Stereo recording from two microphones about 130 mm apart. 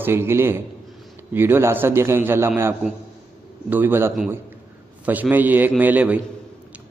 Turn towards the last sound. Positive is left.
turn(degrees=-10)  # may be behind; listen again after turning